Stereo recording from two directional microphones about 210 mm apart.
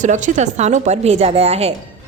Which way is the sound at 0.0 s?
35° right (ahead or behind).